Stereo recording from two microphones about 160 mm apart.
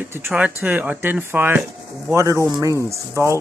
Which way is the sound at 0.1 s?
10° right (ahead or behind).